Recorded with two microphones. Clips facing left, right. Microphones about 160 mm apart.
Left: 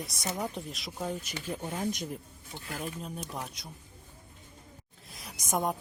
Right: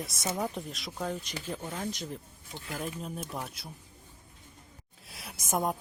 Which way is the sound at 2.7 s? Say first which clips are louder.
Right 1 dB; centre (ahead or behind).